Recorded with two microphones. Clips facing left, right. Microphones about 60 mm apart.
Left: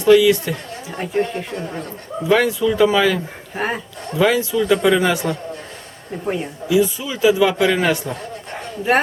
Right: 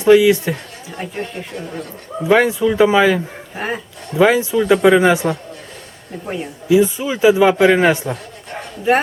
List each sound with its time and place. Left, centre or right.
0.0 s a man's voice: right
1.0 s speech: centre
2.2 s a man's voice: right
3.5 s speech: centre
4.1 s a man's voice: centre
6.7 s a man's voice: right